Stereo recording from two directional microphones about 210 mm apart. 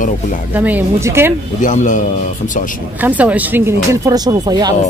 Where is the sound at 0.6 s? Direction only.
10° right (ahead or behind).